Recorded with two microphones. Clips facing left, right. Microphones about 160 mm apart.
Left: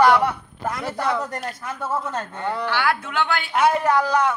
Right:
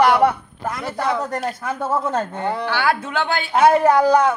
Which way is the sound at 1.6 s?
55° right (ahead or behind).